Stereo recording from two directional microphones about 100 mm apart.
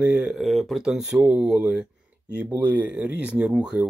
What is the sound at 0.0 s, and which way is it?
Speech, 10° right (ahead or behind).